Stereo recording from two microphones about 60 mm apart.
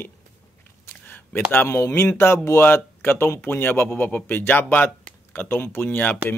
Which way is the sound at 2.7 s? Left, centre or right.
Left.